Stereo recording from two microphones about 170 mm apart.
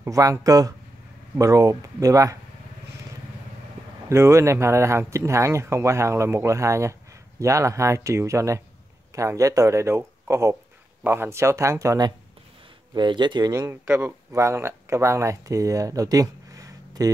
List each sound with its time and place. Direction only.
0.0 s speech: 20° right (ahead or behind)
4.1 s speech: 15° right (ahead or behind)